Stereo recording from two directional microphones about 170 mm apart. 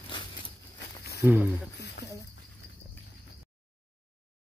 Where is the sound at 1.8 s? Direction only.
80° left.